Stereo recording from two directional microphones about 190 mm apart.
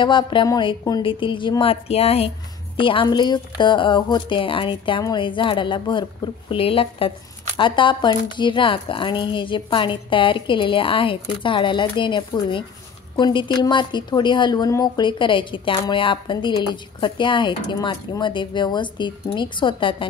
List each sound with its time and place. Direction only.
0.0 s a woman's voice: 25° left (ahead or behind)